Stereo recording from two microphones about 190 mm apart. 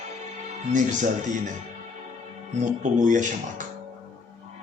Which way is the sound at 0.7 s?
40° right (ahead or behind).